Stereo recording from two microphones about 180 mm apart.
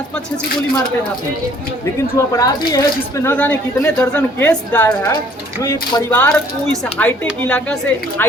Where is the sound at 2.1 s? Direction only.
20° left (ahead or behind).